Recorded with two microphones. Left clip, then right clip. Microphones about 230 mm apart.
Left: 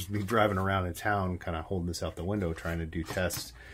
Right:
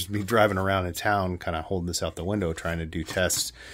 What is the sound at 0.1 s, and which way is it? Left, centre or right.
Speech, right.